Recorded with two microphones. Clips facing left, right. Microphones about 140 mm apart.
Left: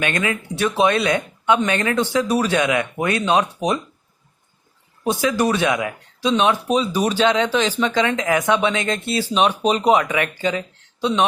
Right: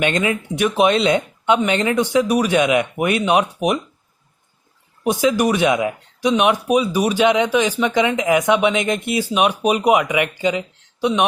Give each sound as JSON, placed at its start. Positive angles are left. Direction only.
{"t": 0.0, "sound": "speech", "side_deg": -20}
{"t": 5.0, "sound": "speech", "side_deg": -15}